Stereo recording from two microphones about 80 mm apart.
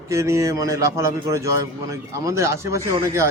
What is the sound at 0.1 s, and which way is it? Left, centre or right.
Speech, right.